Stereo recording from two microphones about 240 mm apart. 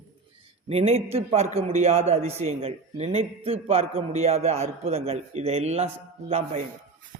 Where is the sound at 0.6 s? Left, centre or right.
Right.